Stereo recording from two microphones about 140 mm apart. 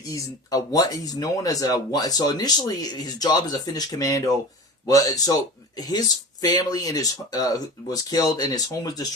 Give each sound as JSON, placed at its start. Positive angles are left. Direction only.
{"t": 0.1, "sound": "speech", "side_deg": 25}